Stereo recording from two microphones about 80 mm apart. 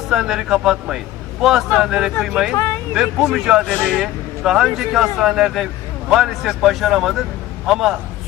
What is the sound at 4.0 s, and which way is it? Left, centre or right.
Speech, centre.